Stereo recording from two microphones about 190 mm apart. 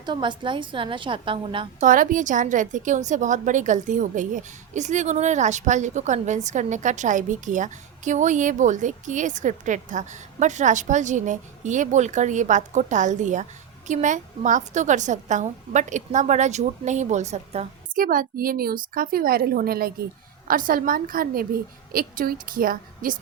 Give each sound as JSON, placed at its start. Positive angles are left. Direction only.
{"t": 0.0, "sound": "a woman's voice", "side_deg": -25}
{"t": 1.8, "sound": "a woman's voice", "side_deg": -45}
{"t": 18.0, "sound": "a woman's voice", "side_deg": -45}